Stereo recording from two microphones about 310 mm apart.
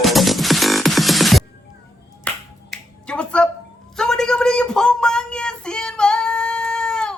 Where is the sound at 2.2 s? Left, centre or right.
Centre.